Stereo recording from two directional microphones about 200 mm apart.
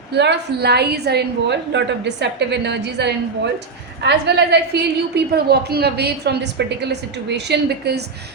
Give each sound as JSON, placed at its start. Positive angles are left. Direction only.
{"t": 0.1, "sound": "a woman's voice", "side_deg": -55}